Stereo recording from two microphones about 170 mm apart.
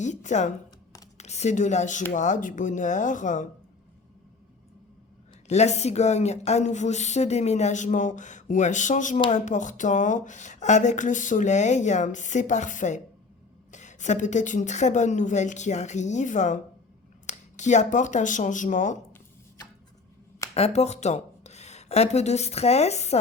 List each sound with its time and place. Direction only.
0.0 s speech: 45° left (ahead or behind)
5.5 s speech: 40° left (ahead or behind)
20.5 s speech: 40° left (ahead or behind)